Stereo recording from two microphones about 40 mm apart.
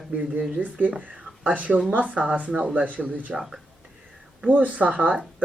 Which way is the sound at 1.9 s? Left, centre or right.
Right.